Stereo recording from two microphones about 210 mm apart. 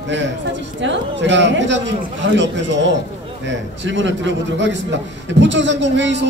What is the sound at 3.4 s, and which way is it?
A man's voice, 60° right (ahead or behind).